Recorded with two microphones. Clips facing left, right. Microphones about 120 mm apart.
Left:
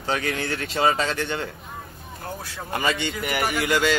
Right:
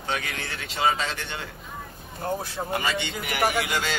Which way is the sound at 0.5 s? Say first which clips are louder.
Left 2 dB; 50° left (ahead or behind).